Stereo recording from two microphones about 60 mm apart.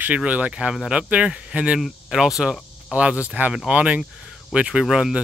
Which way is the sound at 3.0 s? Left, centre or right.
Right.